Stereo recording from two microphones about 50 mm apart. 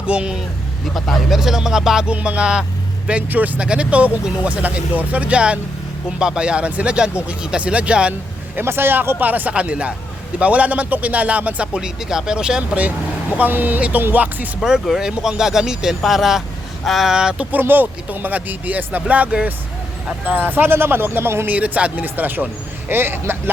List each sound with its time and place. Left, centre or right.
0.0 s speech: right
0.9 s speech: centre
2.0 s speech: right
3.2 s speech: right
3.6 s speech: right
8.5 s speech: right
9.6 s speech: right
13.3 s speech: right
14.8 s speech: centre
17.1 s speech: centre
17.5 s speech: right
21.4 s speech: right
22.0 s speech: right